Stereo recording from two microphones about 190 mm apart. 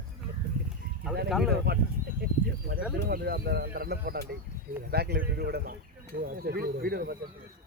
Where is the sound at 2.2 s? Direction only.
55° right (ahead or behind).